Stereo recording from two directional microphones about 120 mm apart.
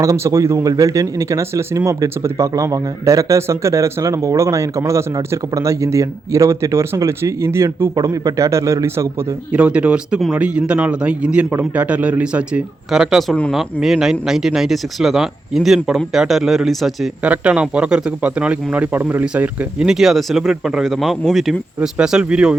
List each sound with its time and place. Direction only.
0.0 s speech: 25° right (ahead or behind)
9.5 s speech: 10° right (ahead or behind)
17.2 s speech: 10° right (ahead or behind)